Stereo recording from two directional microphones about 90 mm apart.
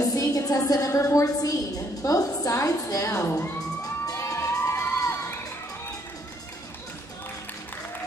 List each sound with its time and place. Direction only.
0.0 s a woman's voice: 40° left (ahead or behind)
4.1 s crowd: 35° left (ahead or behind)